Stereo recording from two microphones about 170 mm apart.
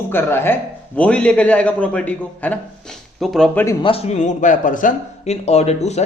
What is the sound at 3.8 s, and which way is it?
A man's voice, 35° left (ahead or behind).